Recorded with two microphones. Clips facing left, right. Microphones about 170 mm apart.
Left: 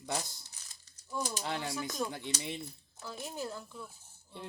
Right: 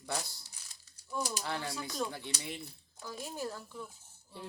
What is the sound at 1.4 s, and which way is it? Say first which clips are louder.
Speech: left 2 dB; 20° left (ahead or behind).